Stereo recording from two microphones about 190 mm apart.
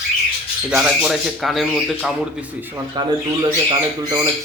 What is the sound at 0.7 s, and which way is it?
Speech, 5° right (ahead or behind).